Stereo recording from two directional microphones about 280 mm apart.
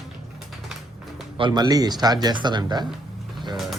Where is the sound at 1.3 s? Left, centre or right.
Centre.